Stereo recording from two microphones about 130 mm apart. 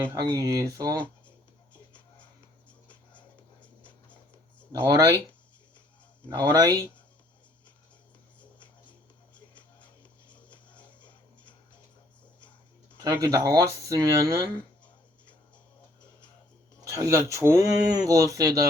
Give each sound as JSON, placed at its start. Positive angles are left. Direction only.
{"t": 0.0, "sound": "speech", "side_deg": -25}
{"t": 3.6, "sound": "writing", "side_deg": 10}
{"t": 4.9, "sound": "speech", "side_deg": -25}
{"t": 6.2, "sound": "speech", "side_deg": -30}
{"t": 10.2, "sound": "music", "side_deg": 10}
{"t": 13.0, "sound": "speech", "side_deg": -20}
{"t": 16.8, "sound": "speech", "side_deg": -25}